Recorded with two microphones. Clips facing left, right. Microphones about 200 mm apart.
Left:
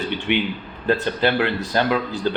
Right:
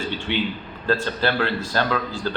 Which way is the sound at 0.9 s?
20° left (ahead or behind).